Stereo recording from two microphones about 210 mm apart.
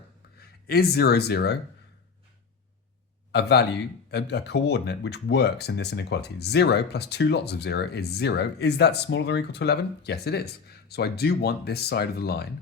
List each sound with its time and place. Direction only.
0.3 s speech: 45° left (ahead or behind)
3.3 s speech: 50° left (ahead or behind)